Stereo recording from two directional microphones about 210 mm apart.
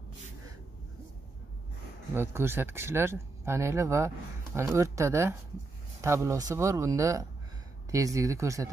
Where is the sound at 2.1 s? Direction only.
10° right (ahead or behind).